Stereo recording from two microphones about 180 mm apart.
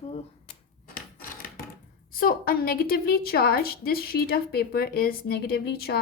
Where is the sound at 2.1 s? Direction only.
50° left (ahead or behind).